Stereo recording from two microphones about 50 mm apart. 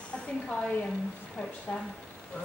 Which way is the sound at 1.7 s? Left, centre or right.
Left.